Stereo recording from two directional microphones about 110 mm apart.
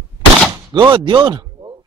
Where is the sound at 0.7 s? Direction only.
50° right (ahead or behind).